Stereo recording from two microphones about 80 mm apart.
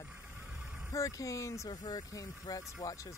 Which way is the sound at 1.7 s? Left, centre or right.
Left.